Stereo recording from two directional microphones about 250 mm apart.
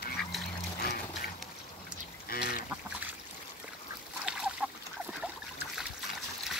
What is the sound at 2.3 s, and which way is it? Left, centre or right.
Duck, left.